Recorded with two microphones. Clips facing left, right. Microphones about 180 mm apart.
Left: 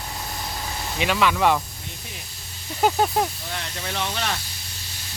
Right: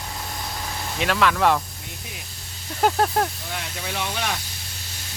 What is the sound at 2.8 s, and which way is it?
Speech, centre (ahead or behind).